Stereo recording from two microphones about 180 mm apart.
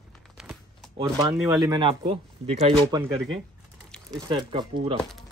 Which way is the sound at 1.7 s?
30° right (ahead or behind).